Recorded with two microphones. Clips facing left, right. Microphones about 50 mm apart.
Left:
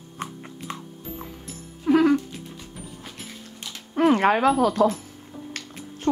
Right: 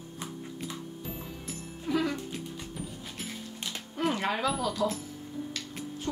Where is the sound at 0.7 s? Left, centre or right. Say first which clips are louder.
Left 5 dB; left.